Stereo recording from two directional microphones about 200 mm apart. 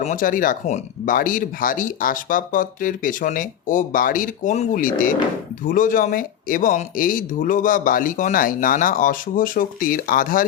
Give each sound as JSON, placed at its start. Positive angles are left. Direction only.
{"t": 0.0, "sound": "speech", "side_deg": 40}